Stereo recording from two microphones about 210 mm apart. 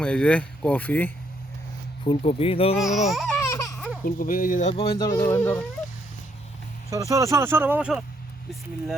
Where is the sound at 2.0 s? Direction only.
25° left (ahead or behind).